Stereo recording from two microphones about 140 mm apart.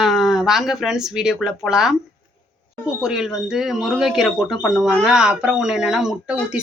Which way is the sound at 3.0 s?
5° right (ahead or behind).